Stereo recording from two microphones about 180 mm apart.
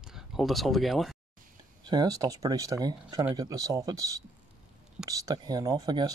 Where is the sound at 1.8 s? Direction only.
20° right (ahead or behind).